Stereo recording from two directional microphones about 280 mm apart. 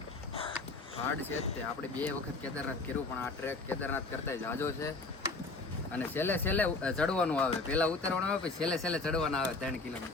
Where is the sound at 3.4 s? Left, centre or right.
Centre.